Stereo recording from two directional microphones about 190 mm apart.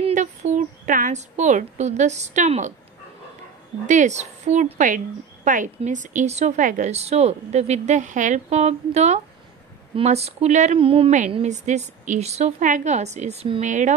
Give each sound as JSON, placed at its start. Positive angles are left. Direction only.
{"t": 0.0, "sound": "speech", "side_deg": -40}
{"t": 3.8, "sound": "a woman's voice", "side_deg": -40}